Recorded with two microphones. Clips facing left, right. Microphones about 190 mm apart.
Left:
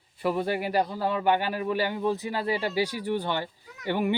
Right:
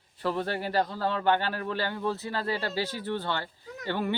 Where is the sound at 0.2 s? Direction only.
10° left (ahead or behind).